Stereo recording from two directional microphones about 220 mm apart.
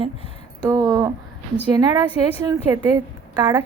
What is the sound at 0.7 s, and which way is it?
Speech, 15° right (ahead or behind).